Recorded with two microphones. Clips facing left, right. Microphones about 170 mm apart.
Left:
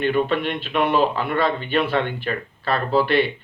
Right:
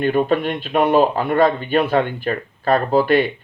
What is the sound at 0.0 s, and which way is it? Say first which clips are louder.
Speech: right 3 dB; 45° right (ahead or behind).